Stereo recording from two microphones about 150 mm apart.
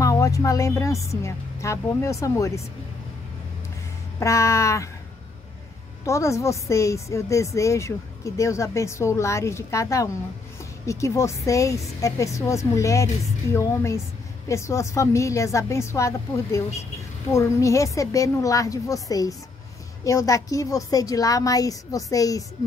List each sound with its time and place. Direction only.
0.0 s a woman's voice: 20° left (ahead or behind)
4.2 s a woman's voice: 20° left (ahead or behind)
6.0 s a woman's voice: 20° left (ahead or behind)